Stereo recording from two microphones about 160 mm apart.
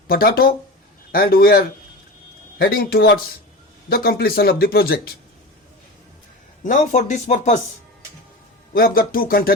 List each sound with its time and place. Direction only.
0.1 s speech: 70° left (ahead or behind)
6.6 s speech: 50° left (ahead or behind)
8.7 s speech: 70° left (ahead or behind)